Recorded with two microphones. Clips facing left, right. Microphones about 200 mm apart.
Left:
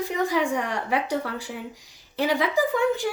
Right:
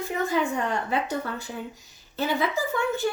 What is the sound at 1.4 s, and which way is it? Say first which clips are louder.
Speech: even; 15° left (ahead or behind).